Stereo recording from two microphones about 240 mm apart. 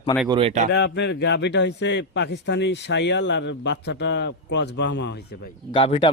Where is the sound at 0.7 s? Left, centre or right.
Left.